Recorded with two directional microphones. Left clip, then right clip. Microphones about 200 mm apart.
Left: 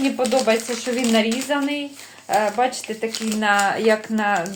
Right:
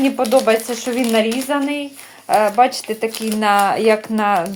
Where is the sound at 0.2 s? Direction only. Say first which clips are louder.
Right 4 dB; 30° right (ahead or behind).